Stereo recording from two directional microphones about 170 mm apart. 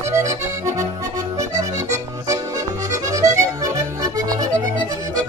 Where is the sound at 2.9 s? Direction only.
20° right (ahead or behind).